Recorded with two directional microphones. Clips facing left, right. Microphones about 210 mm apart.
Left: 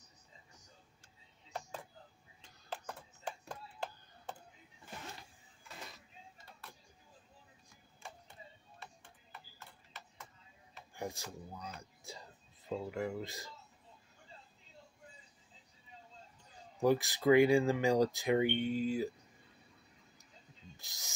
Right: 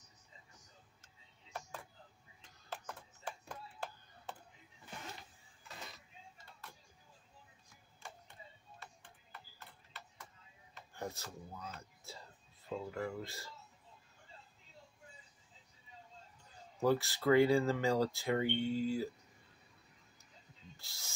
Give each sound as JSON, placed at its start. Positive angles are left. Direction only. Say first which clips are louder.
{"t": 11.0, "sound": "speech", "louder": "left 2 dB", "side_deg": 15}
{"t": 16.8, "sound": "speech", "louder": "left 2 dB", "side_deg": 15}
{"t": 20.7, "sound": "speech", "louder": "left 1 dB", "side_deg": 20}